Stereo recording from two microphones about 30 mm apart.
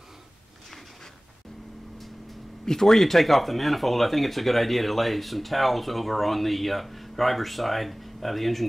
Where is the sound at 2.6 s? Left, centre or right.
Centre.